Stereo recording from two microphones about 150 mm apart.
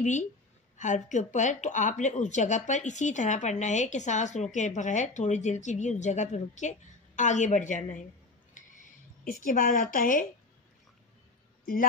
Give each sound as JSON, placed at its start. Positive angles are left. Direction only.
{"t": 0.0, "sound": "a woman's voice", "side_deg": 55}
{"t": 9.2, "sound": "a woman's voice", "side_deg": 70}